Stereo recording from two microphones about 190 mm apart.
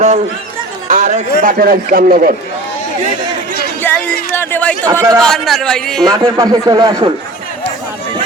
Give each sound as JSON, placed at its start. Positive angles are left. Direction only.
{"t": 0.9, "sound": "a man's voice", "side_deg": -40}
{"t": 3.9, "sound": "a sound", "side_deg": 10}
{"t": 4.3, "sound": "speech", "side_deg": 10}
{"t": 4.9, "sound": "a man's voice", "side_deg": -20}
{"t": 5.2, "sound": "speech", "side_deg": 0}
{"t": 6.1, "sound": "speech", "side_deg": -20}